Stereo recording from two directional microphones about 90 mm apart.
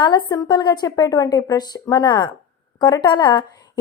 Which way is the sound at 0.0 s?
55° left (ahead or behind).